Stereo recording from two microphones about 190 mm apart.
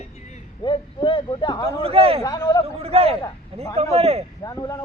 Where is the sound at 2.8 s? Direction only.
30° right (ahead or behind).